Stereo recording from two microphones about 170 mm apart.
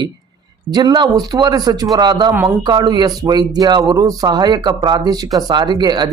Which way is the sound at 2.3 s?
10° right (ahead or behind).